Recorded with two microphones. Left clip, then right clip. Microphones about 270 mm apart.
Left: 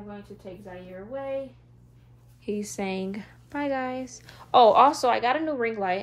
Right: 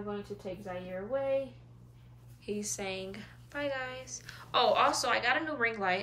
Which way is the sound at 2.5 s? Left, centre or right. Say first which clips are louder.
Left 6 dB; centre.